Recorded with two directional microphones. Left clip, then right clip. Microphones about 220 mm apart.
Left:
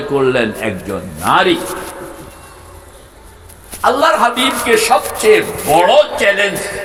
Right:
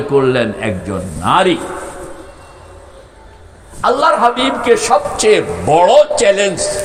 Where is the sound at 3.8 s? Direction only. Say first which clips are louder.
Even; 30° right (ahead or behind).